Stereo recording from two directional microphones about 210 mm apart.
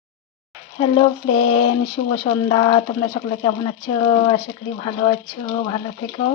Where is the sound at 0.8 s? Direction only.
25° left (ahead or behind).